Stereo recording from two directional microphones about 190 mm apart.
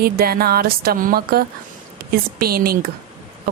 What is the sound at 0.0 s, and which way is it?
Speech, 55° right (ahead or behind).